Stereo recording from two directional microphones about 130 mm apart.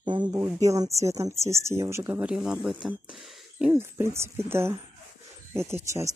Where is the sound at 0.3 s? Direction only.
25° right (ahead or behind).